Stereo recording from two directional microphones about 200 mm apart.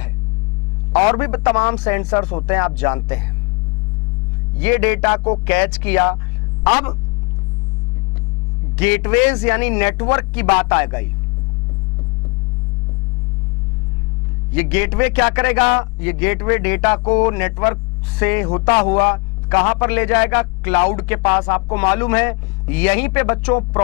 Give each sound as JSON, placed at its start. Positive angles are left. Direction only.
{"t": 1.1, "sound": "a man's voice", "side_deg": 15}
{"t": 4.6, "sound": "a man's voice", "side_deg": 15}
{"t": 5.0, "sound": "speech", "side_deg": 25}
{"t": 5.5, "sound": "a man's voice", "side_deg": 10}
{"t": 8.7, "sound": "a man's voice", "side_deg": 10}
{"t": 14.5, "sound": "a man's voice", "side_deg": 10}
{"t": 15.5, "sound": "speech", "side_deg": 25}
{"t": 16.0, "sound": "a man's voice", "side_deg": 10}